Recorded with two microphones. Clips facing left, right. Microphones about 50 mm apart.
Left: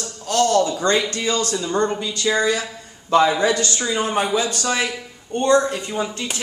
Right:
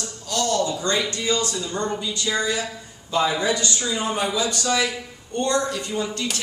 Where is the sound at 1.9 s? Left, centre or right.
Left.